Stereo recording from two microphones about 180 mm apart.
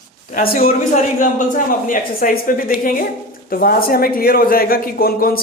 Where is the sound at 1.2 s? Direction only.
45° left (ahead or behind).